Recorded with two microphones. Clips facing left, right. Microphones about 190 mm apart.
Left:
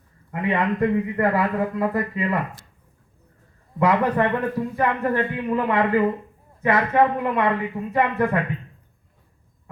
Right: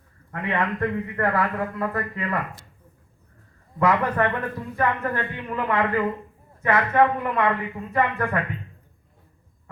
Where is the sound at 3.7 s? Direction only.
15° left (ahead or behind).